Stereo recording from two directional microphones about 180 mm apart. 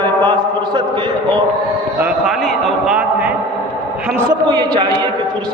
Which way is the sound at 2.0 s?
5° right (ahead or behind).